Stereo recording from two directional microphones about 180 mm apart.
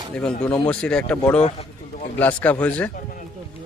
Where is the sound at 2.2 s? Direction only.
10° left (ahead or behind).